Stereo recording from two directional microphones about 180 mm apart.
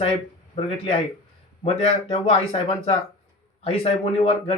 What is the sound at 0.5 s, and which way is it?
Speech, 30° left (ahead or behind).